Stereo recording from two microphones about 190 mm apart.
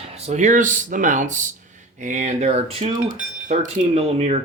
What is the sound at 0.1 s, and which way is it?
Speech, 35° right (ahead or behind).